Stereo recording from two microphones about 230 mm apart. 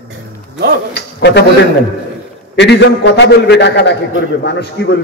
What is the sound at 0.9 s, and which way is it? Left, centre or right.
Speech, left.